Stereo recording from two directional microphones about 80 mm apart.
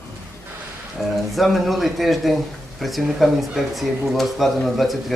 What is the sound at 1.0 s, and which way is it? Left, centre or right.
Speech, centre.